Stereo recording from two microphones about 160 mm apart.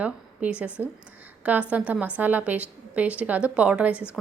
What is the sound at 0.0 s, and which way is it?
A woman's voice, 10° right (ahead or behind).